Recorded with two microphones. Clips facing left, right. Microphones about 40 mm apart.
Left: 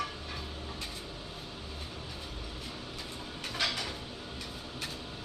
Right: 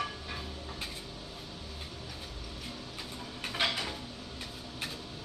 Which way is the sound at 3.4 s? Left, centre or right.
Right.